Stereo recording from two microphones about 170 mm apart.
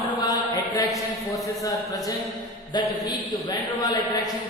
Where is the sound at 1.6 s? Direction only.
20° left (ahead or behind).